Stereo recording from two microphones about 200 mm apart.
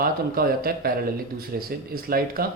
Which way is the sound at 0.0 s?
50° right (ahead or behind).